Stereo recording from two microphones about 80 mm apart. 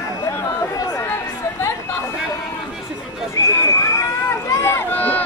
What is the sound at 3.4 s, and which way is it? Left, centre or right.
Horse, left.